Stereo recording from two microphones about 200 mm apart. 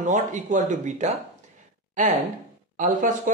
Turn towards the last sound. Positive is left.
turn(degrees=-40)  # may be behind; listen again after turning